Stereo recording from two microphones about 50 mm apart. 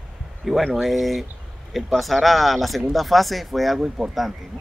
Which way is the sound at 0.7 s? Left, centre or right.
Centre.